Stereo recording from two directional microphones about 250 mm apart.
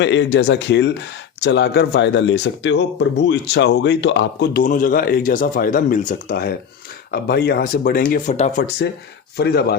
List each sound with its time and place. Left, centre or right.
0.0 s speech: left
9.4 s speech: left